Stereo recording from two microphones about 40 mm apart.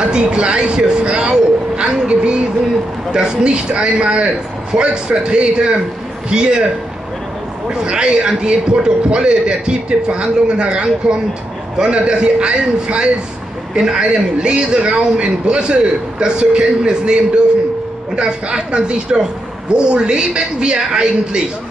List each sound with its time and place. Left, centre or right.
0.0 s a sound: right
3.1 s a man's voice: right
7.7 s a man's voice: right
18.1 s a man's voice: right